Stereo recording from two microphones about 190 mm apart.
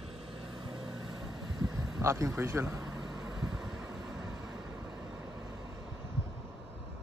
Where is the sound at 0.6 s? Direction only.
25° right (ahead or behind).